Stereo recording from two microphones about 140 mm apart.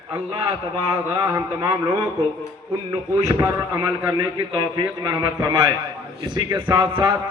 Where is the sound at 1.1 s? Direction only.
25° right (ahead or behind).